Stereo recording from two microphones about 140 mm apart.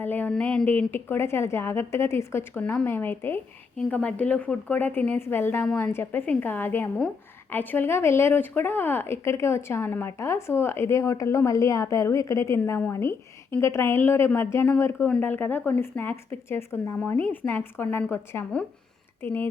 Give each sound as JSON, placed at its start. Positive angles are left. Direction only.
{"t": 0.0, "sound": "speech", "side_deg": 15}